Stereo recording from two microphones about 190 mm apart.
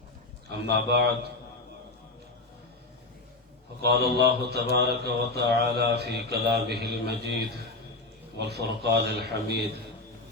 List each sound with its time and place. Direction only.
0.7 s mantra: 60° right (ahead or behind)
3.8 s mantra: 55° right (ahead or behind)